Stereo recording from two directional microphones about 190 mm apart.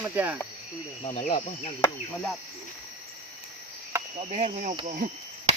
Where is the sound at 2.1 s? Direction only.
5° left (ahead or behind).